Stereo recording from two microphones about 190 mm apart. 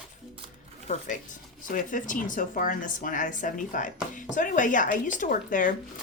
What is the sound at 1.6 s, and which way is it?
Speech, 45° left (ahead or behind).